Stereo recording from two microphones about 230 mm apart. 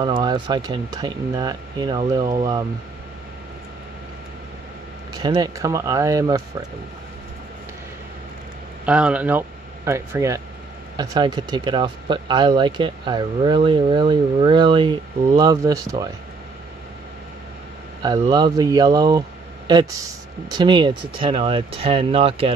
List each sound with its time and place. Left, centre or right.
0.0 s speech: centre
5.1 s speech: centre
8.8 s speech: centre
18.0 s speech: centre